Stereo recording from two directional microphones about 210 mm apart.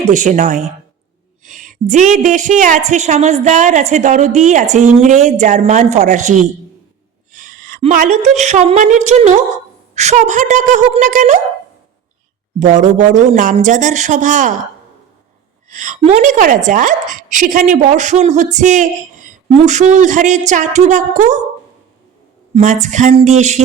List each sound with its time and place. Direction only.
0.1 s a woman's voice: 35° right (ahead or behind)
12.5 s a woman's voice: 35° right (ahead or behind)
15.7 s a woman's voice: 35° right (ahead or behind)
22.5 s a woman's voice: 35° right (ahead or behind)